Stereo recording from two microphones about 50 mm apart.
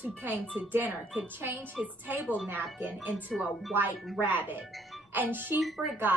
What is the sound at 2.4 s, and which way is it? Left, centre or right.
Speech, right.